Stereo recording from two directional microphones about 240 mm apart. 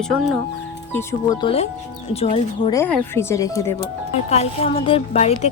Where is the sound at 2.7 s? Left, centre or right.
Centre.